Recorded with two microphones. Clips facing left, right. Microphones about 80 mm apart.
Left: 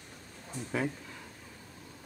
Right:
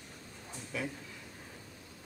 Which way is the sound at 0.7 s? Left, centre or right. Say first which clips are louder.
Left 6 dB; left.